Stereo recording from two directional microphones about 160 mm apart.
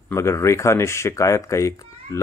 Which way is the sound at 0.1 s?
15° left (ahead or behind).